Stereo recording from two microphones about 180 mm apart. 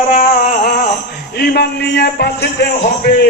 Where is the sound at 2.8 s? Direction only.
55° left (ahead or behind).